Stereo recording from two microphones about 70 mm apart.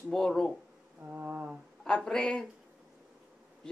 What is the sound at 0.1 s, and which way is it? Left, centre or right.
Speech, centre.